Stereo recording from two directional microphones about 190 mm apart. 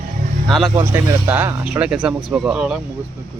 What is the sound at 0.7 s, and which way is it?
Speech, 15° right (ahead or behind).